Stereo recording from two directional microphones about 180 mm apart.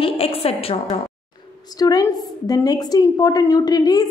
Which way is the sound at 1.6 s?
20° left (ahead or behind).